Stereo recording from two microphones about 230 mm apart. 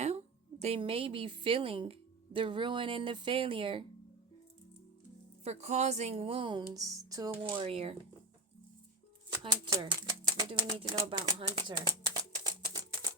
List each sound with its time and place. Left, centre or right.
0.6 s speech: right
5.5 s speech: right
7.6 s speech: right
9.4 s speech: centre
12.6 s a sound: centre